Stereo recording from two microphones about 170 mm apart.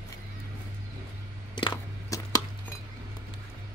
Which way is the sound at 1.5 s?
20° left (ahead or behind).